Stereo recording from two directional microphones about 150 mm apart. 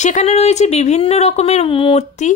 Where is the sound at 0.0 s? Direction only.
50° left (ahead or behind).